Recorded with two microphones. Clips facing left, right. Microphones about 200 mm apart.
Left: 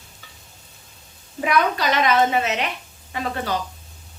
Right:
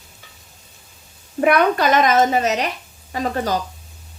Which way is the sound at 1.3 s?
55° right (ahead or behind).